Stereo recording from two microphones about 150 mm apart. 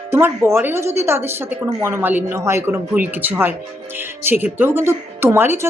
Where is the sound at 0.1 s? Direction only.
15° right (ahead or behind).